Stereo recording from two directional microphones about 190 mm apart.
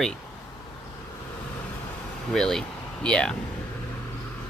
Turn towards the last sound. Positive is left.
turn(degrees=5)  # may be behind; listen again after turning